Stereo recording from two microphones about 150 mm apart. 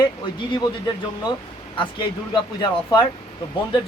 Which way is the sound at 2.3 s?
30° left (ahead or behind).